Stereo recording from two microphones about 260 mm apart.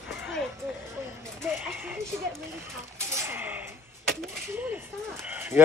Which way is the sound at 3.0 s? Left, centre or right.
Centre.